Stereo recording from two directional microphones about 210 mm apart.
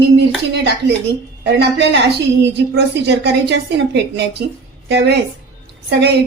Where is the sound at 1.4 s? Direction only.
55° right (ahead or behind).